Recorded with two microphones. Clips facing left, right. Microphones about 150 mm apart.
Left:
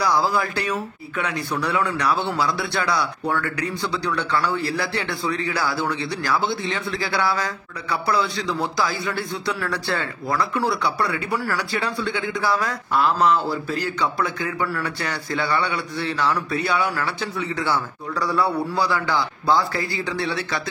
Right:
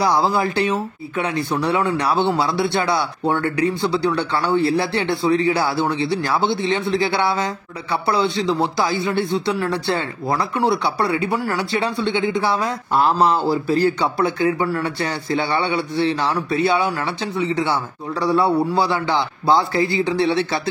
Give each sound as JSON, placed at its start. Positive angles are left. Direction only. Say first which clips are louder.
{"t": 0.0, "sound": "speech", "louder": "right 3 dB", "side_deg": -25}